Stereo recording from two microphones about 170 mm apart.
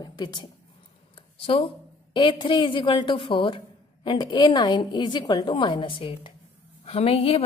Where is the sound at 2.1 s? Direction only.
30° left (ahead or behind).